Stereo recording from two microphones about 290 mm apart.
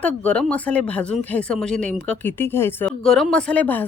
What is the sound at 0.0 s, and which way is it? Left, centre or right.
Speech, centre.